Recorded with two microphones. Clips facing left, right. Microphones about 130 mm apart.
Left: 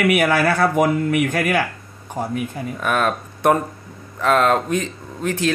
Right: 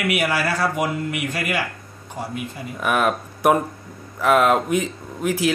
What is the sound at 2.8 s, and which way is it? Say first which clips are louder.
Speech: even; 15° right (ahead or behind).